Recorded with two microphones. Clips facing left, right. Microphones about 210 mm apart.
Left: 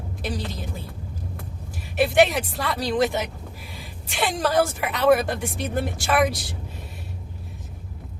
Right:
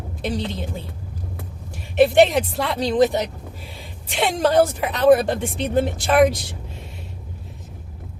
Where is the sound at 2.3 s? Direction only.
20° right (ahead or behind).